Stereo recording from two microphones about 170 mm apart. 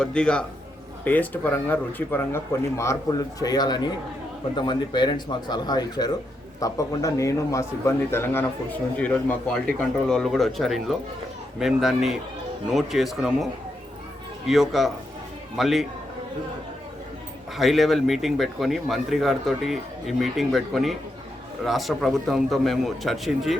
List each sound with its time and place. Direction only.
0.0 s a man's voice: 5° left (ahead or behind)
17.6 s a man's voice: centre (ahead or behind)